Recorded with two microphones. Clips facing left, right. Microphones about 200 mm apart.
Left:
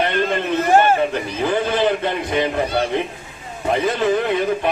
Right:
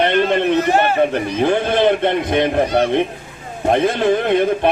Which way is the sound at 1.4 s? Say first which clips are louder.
Right 3 dB; 60° right (ahead or behind).